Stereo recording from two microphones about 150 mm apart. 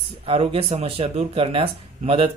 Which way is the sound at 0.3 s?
40° right (ahead or behind).